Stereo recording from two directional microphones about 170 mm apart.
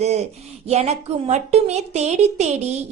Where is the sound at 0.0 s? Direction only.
40° right (ahead or behind).